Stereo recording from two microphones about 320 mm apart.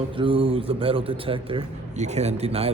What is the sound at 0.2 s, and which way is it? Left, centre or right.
A man's voice, centre.